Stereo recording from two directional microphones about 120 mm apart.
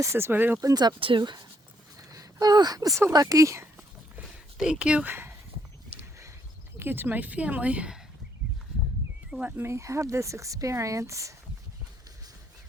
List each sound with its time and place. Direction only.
0.0 s speech: 20° right (ahead or behind)
0.6 s speech: 35° right (ahead or behind)
2.0 s a sound: 30° right (ahead or behind)
3.1 s speech: 30° right (ahead or behind)
4.2 s a sound: 5° right (ahead or behind); by 6.3 s 25° right (ahead or behind)
6.7 s speech: 20° right (ahead or behind)
9.3 s speech: 10° right (ahead or behind)